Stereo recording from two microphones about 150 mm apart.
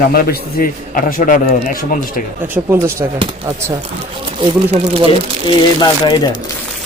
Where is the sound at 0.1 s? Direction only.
80° left; by 2.2 s 65° left (ahead or behind).